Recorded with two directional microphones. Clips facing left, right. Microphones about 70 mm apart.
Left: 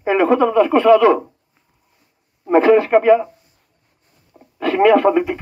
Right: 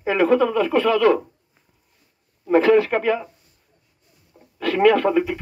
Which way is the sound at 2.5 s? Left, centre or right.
Centre.